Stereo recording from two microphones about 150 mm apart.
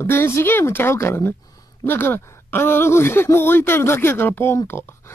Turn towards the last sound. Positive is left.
turn(degrees=15)  # may be behind; listen again after turning